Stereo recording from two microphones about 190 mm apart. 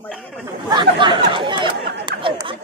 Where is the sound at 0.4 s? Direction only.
20° right (ahead or behind).